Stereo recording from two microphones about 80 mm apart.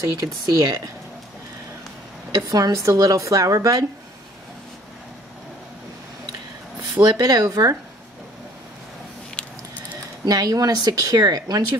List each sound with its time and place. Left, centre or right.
0.0 s speech: right
2.3 s speech: right
7.0 s speech: right
10.2 s speech: right